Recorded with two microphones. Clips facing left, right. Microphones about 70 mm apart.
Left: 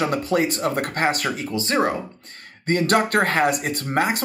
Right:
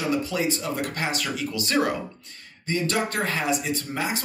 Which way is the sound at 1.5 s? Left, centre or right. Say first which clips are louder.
Left 3 dB; left.